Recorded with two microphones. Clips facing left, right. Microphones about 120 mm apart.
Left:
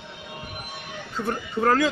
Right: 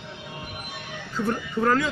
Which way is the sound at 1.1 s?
30° left (ahead or behind).